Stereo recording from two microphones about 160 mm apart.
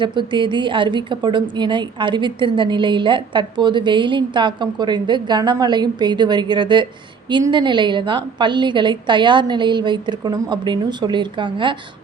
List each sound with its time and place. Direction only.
0.0 s a woman's voice: 30° right (ahead or behind)